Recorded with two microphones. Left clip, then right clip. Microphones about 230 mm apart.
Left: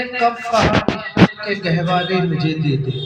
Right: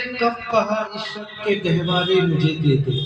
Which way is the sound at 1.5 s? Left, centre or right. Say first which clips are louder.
Left 2 dB; left.